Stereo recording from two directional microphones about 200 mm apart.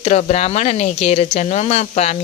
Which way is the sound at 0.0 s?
35° left (ahead or behind).